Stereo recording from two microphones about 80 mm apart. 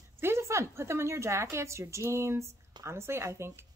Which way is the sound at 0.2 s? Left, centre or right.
Right.